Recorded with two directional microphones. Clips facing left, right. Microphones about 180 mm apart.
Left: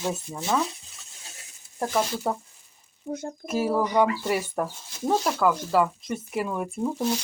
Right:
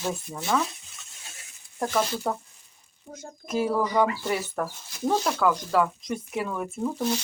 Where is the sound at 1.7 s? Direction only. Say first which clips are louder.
Even; 5° left (ahead or behind).